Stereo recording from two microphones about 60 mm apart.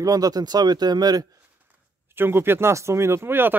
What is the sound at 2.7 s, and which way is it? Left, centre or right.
Speech, right.